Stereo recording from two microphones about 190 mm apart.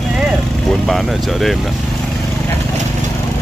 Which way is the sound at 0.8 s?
Centre (ahead or behind).